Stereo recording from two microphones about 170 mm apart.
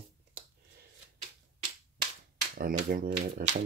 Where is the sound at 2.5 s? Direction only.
55° right (ahead or behind).